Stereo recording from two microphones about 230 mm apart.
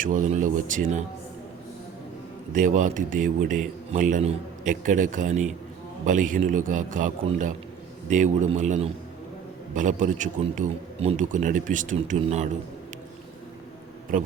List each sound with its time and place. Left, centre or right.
0.0 s speech: right
2.5 s speech: right
14.1 s speech: right